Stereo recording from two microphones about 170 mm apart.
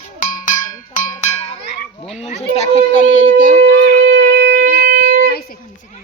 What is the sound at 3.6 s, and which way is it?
Shofar, 80° right.